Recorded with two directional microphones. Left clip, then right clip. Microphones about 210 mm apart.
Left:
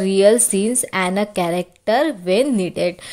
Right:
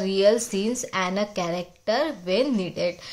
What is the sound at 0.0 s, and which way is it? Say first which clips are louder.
A woman's voice: left 6 dB; 30° left (ahead or behind).